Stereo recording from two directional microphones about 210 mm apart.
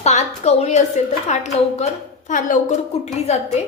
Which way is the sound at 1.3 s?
35° left (ahead or behind).